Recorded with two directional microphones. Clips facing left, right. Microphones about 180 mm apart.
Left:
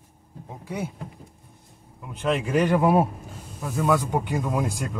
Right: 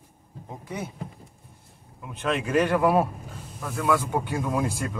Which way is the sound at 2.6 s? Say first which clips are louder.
Left 3 dB; 20° left (ahead or behind).